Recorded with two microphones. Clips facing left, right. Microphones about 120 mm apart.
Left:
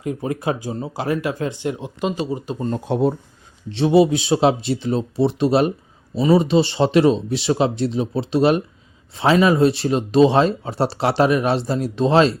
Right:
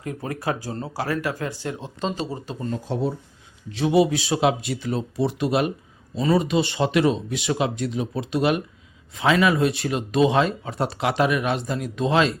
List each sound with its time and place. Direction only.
0.0 s speech: 20° left (ahead or behind)
2.7 s speech: 60° left (ahead or behind)
3.7 s speech: 30° left (ahead or behind)